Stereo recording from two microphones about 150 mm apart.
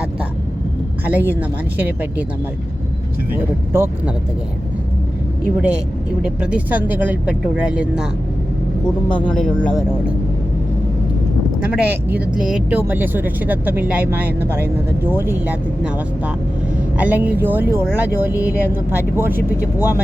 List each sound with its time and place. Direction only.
1.0 s speech: 10° right (ahead or behind)
3.3 s speech: 15° right (ahead or behind)
5.5 s speech: 10° right (ahead or behind)
9.2 s speech: 10° left (ahead or behind)
11.6 s speech: 10° right (ahead or behind)